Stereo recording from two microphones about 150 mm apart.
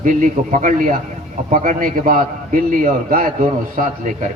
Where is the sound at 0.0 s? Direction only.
60° right (ahead or behind).